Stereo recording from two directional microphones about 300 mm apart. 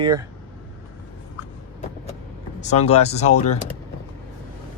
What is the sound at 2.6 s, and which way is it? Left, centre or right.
Speech, left.